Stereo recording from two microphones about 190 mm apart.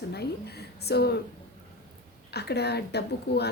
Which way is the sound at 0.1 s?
60° left (ahead or behind).